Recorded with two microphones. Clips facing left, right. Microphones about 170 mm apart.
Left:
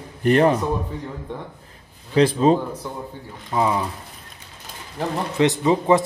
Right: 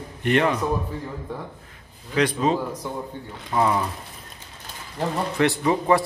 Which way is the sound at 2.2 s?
30° left (ahead or behind).